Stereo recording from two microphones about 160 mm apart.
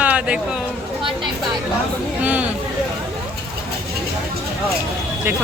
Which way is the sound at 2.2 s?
10° right (ahead or behind).